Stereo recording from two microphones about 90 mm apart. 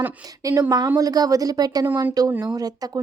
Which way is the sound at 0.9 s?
45° right (ahead or behind).